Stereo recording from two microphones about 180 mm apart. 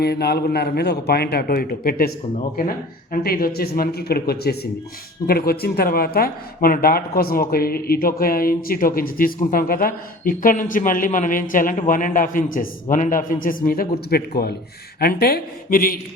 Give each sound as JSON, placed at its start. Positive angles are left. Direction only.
{"t": 0.0, "sound": "a man's voice", "side_deg": 65}